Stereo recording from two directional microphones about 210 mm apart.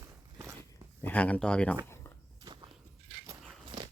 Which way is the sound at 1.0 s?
5° left (ahead or behind).